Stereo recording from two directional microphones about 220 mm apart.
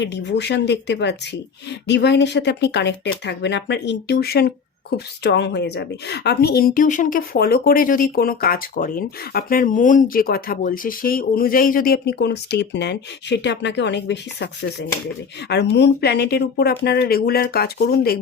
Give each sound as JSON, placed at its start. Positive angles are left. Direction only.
{"t": 0.0, "sound": "a woman's voice", "side_deg": 50}